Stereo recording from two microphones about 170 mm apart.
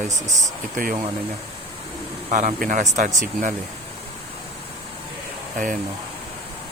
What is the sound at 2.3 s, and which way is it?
Speech, 45° right (ahead or behind).